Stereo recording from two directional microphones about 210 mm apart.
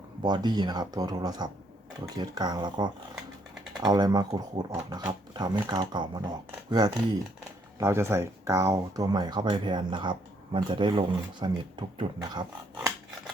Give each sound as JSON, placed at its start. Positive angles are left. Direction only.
{"t": 0.2, "sound": "speech", "side_deg": -20}